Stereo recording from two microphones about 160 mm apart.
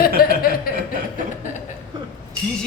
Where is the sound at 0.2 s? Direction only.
70° left (ahead or behind).